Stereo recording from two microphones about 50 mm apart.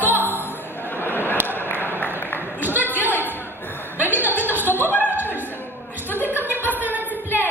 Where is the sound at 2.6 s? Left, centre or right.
Right.